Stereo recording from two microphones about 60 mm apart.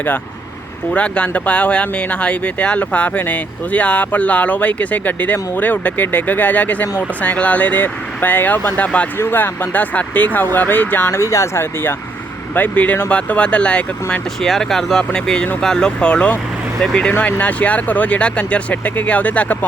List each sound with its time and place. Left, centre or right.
0.9 s speech: centre; by 11.2 s left
11.2 s speech: left
11.6 s speech: left
12.5 s speech: left
14.4 s speech: centre
17.2 s speech: left